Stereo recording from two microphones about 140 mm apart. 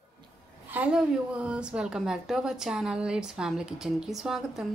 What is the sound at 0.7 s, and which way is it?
Speech, 10° right (ahead or behind).